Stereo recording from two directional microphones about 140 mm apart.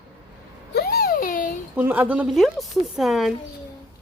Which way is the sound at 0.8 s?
90° left.